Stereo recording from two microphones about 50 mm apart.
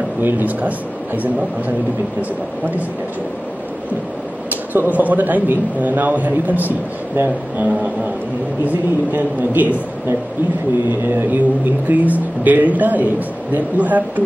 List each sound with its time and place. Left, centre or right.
0.2 s speech: right
4.5 s speech: right
11.1 s speech: right